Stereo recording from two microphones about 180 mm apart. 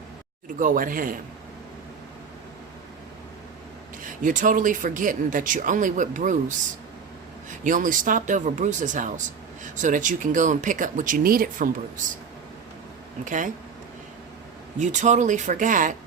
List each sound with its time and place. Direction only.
0.6 s speech: 50° right (ahead or behind)
4.0 s speech: 45° right (ahead or behind)
7.6 s speech: 45° right (ahead or behind)
13.2 s speech: 45° right (ahead or behind)
14.8 s speech: 40° right (ahead or behind)